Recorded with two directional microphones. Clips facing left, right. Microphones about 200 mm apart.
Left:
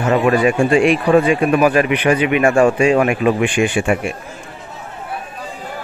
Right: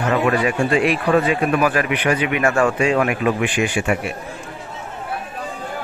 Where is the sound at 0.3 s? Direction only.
25° left (ahead or behind).